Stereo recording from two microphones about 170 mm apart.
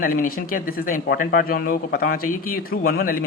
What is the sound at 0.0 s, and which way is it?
Speech, 55° left (ahead or behind).